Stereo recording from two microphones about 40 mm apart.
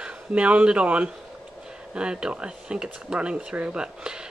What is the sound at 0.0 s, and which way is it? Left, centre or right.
Speech, right.